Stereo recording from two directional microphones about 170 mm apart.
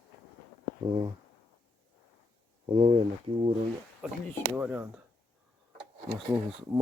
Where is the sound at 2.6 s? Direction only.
35° right (ahead or behind).